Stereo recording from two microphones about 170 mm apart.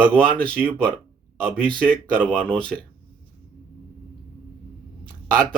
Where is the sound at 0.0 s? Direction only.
5° left (ahead or behind).